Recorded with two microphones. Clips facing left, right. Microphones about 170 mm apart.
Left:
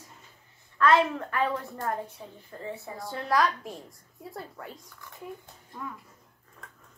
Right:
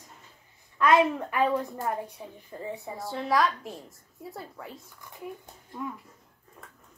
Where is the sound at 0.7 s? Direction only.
15° right (ahead or behind).